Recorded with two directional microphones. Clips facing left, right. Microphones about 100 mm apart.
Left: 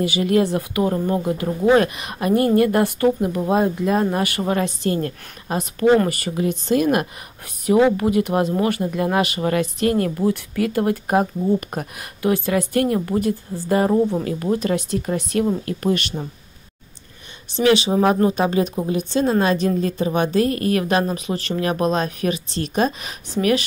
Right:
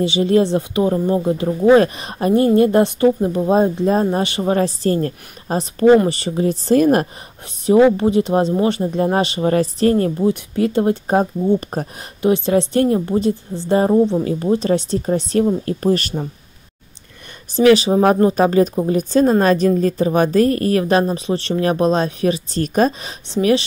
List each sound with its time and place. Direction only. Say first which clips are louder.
0.0 s speech: right 3 dB; 25° right (ahead or behind)
7.6 s speech: right 4 dB; 30° right (ahead or behind)
17.7 s speech: right 3 dB; 35° right (ahead or behind)